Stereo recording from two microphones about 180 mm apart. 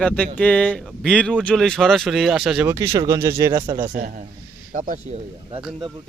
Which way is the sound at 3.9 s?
50° right (ahead or behind).